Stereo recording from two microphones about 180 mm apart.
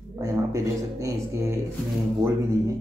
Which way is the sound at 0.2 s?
20° right (ahead or behind).